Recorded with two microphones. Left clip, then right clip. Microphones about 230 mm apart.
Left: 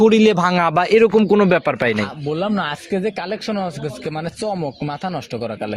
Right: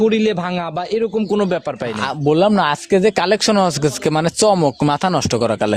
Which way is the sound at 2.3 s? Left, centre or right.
Right.